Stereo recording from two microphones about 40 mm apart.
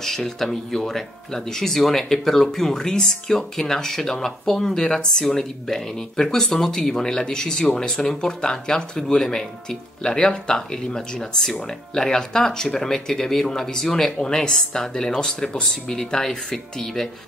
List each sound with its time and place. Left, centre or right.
0.0 s speech: centre